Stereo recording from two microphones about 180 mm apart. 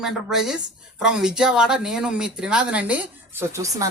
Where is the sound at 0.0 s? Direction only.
Centre (ahead or behind).